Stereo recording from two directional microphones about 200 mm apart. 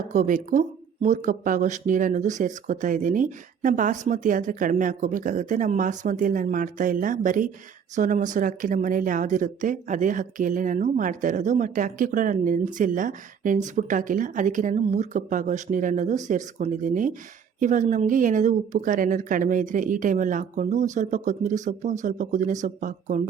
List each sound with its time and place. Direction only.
0.1 s speech: 40° right (ahead or behind)